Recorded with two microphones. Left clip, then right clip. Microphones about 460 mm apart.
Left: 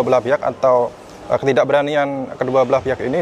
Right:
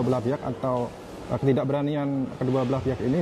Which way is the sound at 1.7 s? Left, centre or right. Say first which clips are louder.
Left 12 dB; left.